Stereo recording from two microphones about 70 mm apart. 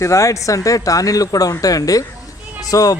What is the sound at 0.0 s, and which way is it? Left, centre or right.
Speech, left.